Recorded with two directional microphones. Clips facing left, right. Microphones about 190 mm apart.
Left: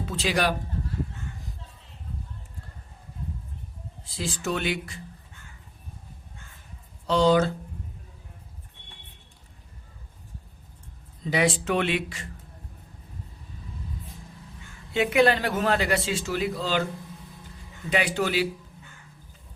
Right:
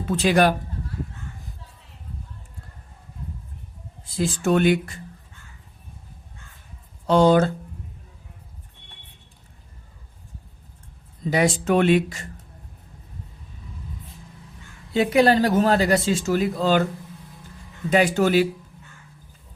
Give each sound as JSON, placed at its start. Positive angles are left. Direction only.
{"t": 0.0, "sound": "speech", "side_deg": -55}
{"t": 4.2, "sound": "speech", "side_deg": -50}
{"t": 7.1, "sound": "speech", "side_deg": -50}
{"t": 11.3, "sound": "speech", "side_deg": -45}
{"t": 14.9, "sound": "speech", "side_deg": -35}
{"t": 17.9, "sound": "speech", "side_deg": -45}